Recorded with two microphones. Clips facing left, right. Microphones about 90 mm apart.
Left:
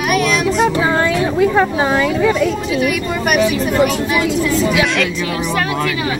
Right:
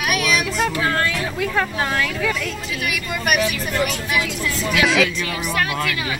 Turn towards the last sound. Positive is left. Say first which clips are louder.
# left 3 dB
turn(degrees=0)  # may be behind; listen again after turning